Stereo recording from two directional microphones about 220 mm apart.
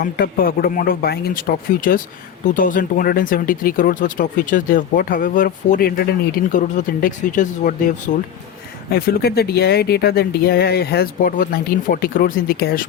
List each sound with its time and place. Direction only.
0.0 s speech: 40° left (ahead or behind)